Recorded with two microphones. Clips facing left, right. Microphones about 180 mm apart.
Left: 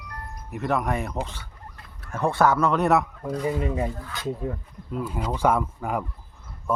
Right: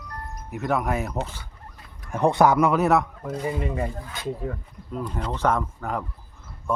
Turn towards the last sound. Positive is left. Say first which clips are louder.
# left 1 dB
turn(degrees=10)  # may be behind; listen again after turning